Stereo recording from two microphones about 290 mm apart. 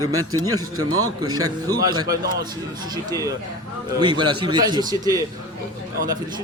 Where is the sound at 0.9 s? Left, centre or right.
Right.